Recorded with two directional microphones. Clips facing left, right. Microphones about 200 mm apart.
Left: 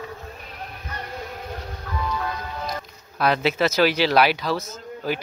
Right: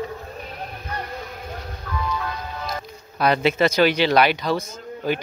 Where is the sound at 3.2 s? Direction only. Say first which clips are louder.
Right 2 dB; centre (ahead or behind).